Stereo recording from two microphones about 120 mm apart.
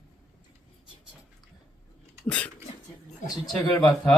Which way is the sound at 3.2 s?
Centre (ahead or behind).